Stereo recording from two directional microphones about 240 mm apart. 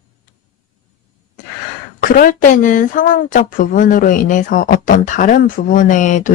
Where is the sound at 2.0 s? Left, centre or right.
Left.